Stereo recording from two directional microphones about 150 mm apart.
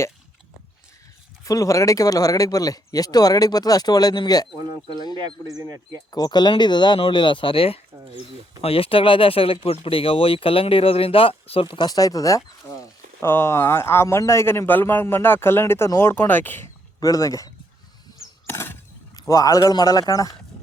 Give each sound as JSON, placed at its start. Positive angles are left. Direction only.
{"t": 1.5, "sound": "speech", "side_deg": 20}
{"t": 5.5, "sound": "speech", "side_deg": -25}
{"t": 6.1, "sound": "speech", "side_deg": 25}
{"t": 18.4, "sound": "a sound", "side_deg": 15}
{"t": 19.3, "sound": "speech", "side_deg": 25}